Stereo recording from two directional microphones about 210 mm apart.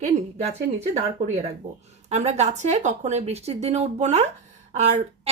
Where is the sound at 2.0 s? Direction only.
30° right (ahead or behind).